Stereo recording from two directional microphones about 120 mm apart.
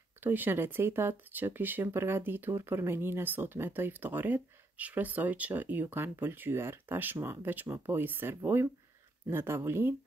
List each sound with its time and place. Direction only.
0.2 s speech: 15° right (ahead or behind)